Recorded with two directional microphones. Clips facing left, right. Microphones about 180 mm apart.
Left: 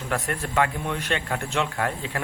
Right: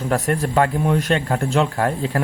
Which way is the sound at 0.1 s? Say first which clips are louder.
Right 7 dB; 35° right (ahead or behind).